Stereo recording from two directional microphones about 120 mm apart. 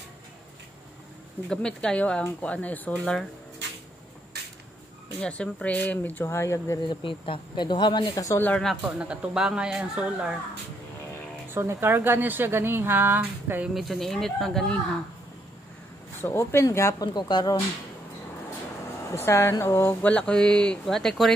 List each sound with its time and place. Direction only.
1.5 s speech: 5° left (ahead or behind)
5.2 s speech: 10° left (ahead or behind)
6.8 s speech: 40° left (ahead or behind)
8.4 s speech: 10° left (ahead or behind)
8.9 s speech: 10° right (ahead or behind)
11.5 s speech: 20° right (ahead or behind)
13.7 s speech: centre (ahead or behind)
16.2 s speech: 20° left (ahead or behind)
17.1 s speech: 35° left (ahead or behind)
19.1 s speech: 20° left (ahead or behind); by 21.3 s 5° left (ahead or behind)